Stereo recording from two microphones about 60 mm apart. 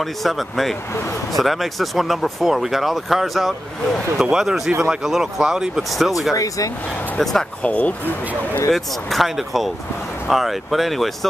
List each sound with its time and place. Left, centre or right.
0.0 s speech: centre
6.3 s speech: left
7.6 s speech: left
8.7 s speech: centre